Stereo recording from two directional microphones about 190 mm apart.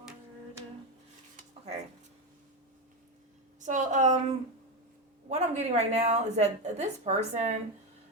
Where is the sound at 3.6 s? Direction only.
40° right (ahead or behind).